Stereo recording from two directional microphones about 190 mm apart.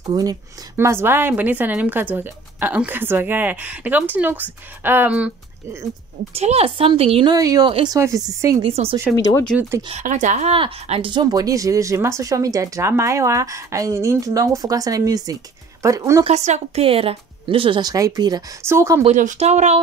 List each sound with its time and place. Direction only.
0.0 s a woman's voice: 20° right (ahead or behind)
6.3 s speech: 35° right (ahead or behind)
8.6 s speech: 30° right (ahead or behind)
9.1 s speech: 20° left (ahead or behind)
9.8 s a woman's voice: 40° right (ahead or behind); by 16.3 s 15° right (ahead or behind)
16.3 s speech: 35° right (ahead or behind); by 19.0 s 15° right (ahead or behind)
19.0 s speech: 40° right (ahead or behind)